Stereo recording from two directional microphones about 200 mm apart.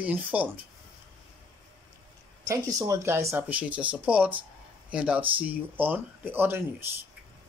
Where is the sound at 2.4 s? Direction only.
15° right (ahead or behind).